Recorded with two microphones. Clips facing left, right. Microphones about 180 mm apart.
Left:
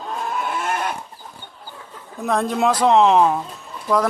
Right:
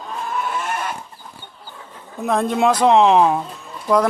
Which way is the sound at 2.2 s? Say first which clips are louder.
Right 2 dB; centre (ahead or behind).